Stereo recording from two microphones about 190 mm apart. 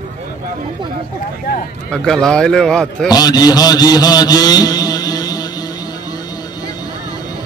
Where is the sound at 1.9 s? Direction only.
5° left (ahead or behind).